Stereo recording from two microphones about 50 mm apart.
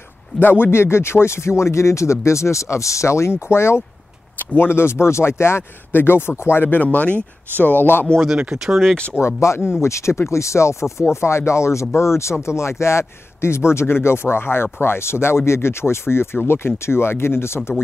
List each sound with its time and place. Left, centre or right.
0.4 s speech: left
4.4 s speech: left
8.4 s speech: centre
9.2 s speech: left